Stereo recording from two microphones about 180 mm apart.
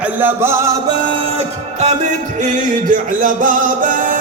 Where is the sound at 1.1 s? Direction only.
35° right (ahead or behind).